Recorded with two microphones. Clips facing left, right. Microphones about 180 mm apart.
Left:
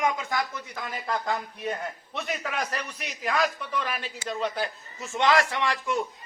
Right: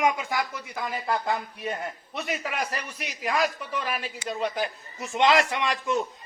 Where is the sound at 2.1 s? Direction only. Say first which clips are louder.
Even; 10° right (ahead or behind).